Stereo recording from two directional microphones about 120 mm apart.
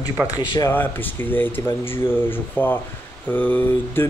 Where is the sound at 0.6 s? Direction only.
20° left (ahead or behind).